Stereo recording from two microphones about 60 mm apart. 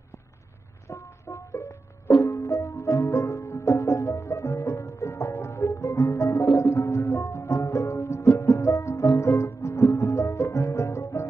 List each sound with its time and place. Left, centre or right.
0.8 s music: left